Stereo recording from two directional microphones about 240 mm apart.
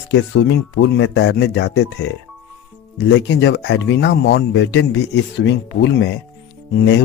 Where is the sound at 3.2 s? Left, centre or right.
Left.